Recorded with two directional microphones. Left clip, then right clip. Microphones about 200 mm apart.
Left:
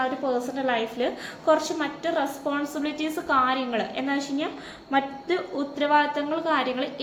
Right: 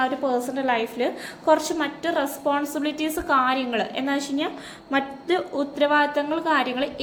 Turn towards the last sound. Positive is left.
turn(degrees=-30)  # may be behind; listen again after turning